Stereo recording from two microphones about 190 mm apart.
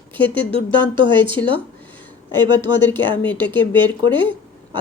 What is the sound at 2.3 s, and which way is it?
Speech, 20° right (ahead or behind).